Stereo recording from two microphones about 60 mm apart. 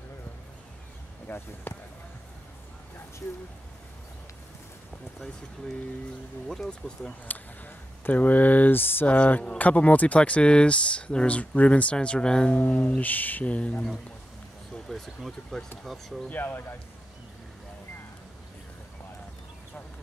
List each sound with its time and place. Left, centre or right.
1.2 s speech: left
6.4 s speech: centre
7.1 s speech: left
9.0 s speech: left
12.5 s speech: left
14.9 s speech: centre
16.3 s speech: left